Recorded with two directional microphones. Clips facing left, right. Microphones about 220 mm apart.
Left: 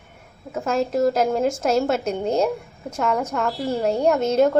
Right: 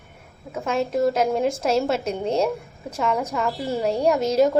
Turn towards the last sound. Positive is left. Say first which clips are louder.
# left 1 dB
turn(degrees=0)  # may be behind; listen again after turning